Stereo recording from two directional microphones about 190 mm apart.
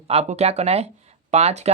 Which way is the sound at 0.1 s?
35° right (ahead or behind).